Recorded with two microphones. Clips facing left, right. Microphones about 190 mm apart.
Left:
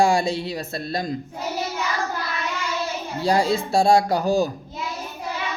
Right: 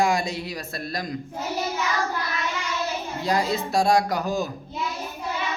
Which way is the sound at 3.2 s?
30° left (ahead or behind).